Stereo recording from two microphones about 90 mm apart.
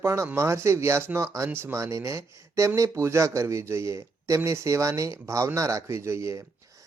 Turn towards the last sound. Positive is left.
turn(degrees=-35)  # may be behind; listen again after turning